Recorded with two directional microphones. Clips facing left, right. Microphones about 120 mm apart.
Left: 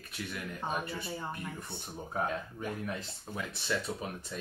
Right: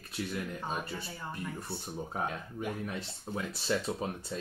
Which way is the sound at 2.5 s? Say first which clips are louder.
Right 1 dB; 20° right (ahead or behind).